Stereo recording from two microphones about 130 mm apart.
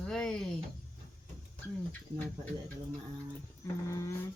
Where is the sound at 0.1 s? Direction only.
5° left (ahead or behind).